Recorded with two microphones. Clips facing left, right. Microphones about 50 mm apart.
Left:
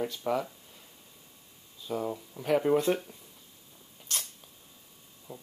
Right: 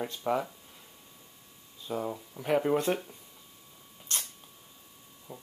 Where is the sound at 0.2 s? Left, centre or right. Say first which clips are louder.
Right 2 dB; centre.